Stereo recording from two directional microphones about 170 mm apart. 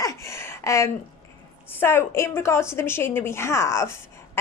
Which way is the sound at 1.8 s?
15° left (ahead or behind).